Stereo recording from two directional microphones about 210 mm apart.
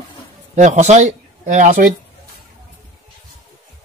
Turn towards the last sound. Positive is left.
turn(degrees=-40)  # may be behind; listen again after turning